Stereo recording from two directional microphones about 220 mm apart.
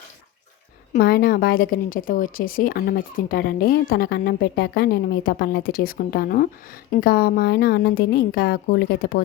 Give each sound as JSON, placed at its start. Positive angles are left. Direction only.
{"t": 0.9, "sound": "a woman's voice", "side_deg": 45}